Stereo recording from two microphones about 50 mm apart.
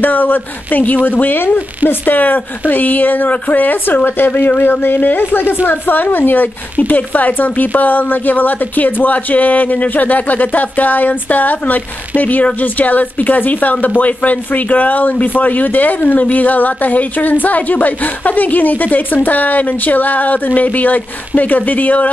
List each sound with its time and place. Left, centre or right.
0.0 s speech: left